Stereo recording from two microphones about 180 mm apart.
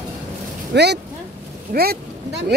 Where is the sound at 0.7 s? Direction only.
70° right (ahead or behind).